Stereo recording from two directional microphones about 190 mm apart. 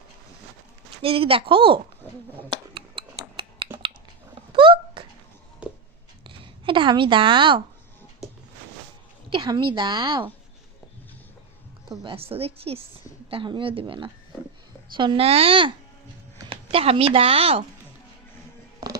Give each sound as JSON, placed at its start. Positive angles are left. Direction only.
{"t": 1.0, "sound": "a woman's voice", "side_deg": -30}
{"t": 2.5, "sound": "scissors", "side_deg": -25}
{"t": 4.4, "sound": "a sound", "side_deg": -25}
{"t": 5.6, "sound": "a sound", "side_deg": -5}
{"t": 6.2, "sound": "speech", "side_deg": -25}
{"t": 9.3, "sound": "a woman's voice", "side_deg": -25}
{"t": 11.9, "sound": "a woman's voice", "side_deg": -30}